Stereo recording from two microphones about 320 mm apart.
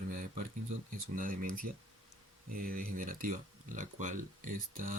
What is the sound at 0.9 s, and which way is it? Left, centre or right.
Speech, right.